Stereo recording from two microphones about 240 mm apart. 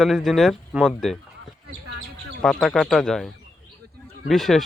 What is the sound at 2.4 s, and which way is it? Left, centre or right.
Speech, centre.